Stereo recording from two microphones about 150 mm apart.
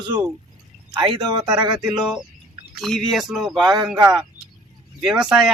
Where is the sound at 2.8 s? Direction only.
Centre (ahead or behind).